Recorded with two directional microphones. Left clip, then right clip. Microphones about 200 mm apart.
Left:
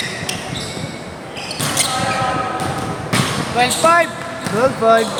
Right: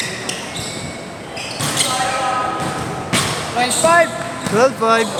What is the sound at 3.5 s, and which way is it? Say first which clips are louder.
Basketball bounce: even; 30° left (ahead or behind).